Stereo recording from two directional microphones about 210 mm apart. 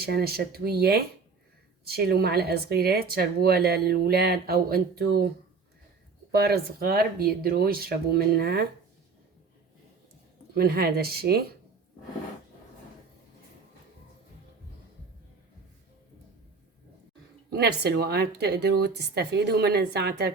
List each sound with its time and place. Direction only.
0.0 s speech: 50° right (ahead or behind)
6.3 s speech: 50° right (ahead or behind)
10.5 s speech: 45° right (ahead or behind)
17.5 s speech: 50° right (ahead or behind)